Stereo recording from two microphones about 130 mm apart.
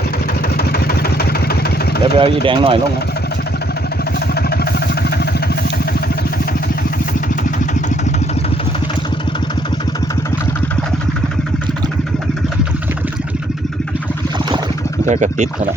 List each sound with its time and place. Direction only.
2.1 s speech: 40° right (ahead or behind)
15.0 s speech: 65° right (ahead or behind)